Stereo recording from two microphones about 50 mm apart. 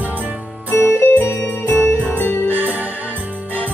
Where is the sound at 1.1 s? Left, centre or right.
Left.